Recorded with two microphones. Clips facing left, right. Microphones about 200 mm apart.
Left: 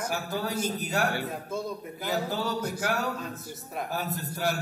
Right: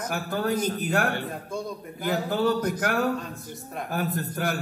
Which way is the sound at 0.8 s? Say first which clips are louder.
Right 3 dB; 55° right (ahead or behind).